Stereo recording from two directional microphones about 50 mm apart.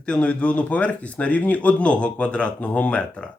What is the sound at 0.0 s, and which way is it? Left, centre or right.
Speech, left.